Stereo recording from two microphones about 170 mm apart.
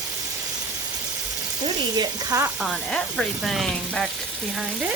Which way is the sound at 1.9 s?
20° right (ahead or behind).